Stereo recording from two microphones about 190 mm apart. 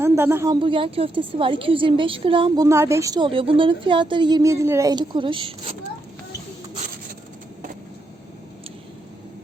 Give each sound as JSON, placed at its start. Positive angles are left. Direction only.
{"t": 0.0, "sound": "a woman's voice", "side_deg": -10}
{"t": 2.6, "sound": "a woman's voice", "side_deg": -15}